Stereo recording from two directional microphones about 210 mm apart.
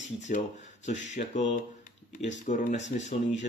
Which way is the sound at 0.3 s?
40° left (ahead or behind).